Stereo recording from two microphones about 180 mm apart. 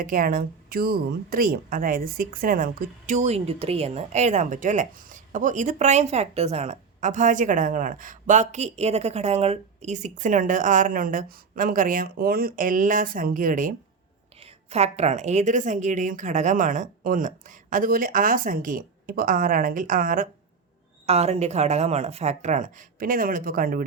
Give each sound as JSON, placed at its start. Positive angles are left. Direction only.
{"t": 0.0, "sound": "speech", "side_deg": -55}
{"t": 14.3, "sound": "speech", "side_deg": -35}
{"t": 21.1, "sound": "speech", "side_deg": -35}